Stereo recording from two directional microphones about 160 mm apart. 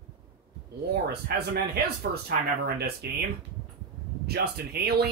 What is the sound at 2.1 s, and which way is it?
Speech, 80° right.